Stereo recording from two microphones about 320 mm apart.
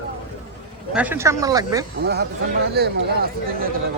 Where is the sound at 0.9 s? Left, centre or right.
Centre.